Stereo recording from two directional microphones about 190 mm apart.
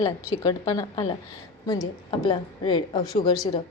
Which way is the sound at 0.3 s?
20° left (ahead or behind).